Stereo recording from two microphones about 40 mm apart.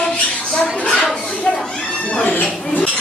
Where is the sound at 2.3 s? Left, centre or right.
Left.